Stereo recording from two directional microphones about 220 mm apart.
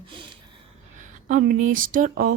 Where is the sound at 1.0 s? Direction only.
35° right (ahead or behind).